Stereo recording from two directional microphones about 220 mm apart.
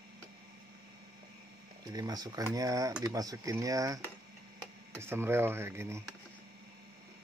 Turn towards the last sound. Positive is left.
turn(degrees=-10)  # may be behind; listen again after turning